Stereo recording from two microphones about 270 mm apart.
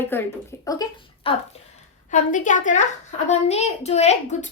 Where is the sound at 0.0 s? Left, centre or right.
Centre.